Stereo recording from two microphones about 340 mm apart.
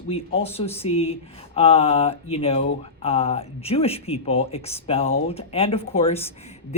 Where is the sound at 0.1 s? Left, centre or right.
Centre.